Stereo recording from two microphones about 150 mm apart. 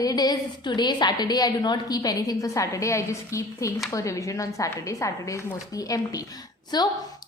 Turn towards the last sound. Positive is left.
turn(degrees=30)  # may be behind; listen again after turning